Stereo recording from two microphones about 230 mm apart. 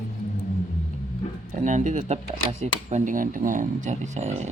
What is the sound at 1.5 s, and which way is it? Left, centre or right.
Speech, right.